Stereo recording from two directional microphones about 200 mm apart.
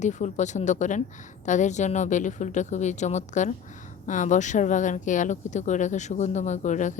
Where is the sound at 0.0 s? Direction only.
35° left (ahead or behind).